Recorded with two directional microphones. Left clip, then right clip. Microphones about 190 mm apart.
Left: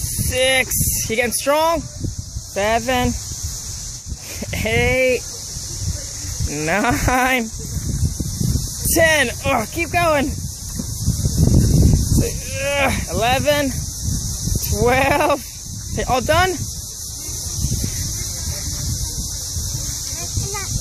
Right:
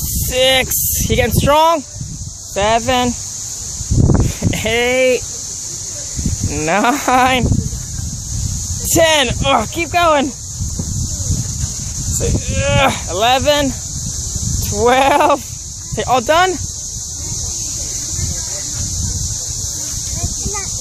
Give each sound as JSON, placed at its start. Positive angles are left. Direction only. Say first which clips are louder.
{"t": 0.3, "sound": "speech", "louder": "right 4 dB", "side_deg": -10}
{"t": 4.4, "sound": "speech", "louder": "right 1 dB", "side_deg": -10}
{"t": 6.5, "sound": "speech", "louder": "right 4 dB", "side_deg": -10}
{"t": 8.9, "sound": "speech", "louder": "right 3 dB", "side_deg": -5}
{"t": 12.2, "sound": "speech", "louder": "right 3 dB", "side_deg": -10}
{"t": 14.8, "sound": "speech", "louder": "right 5 dB", "side_deg": -5}